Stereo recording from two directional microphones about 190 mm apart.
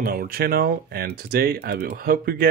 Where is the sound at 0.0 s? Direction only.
50° right (ahead or behind).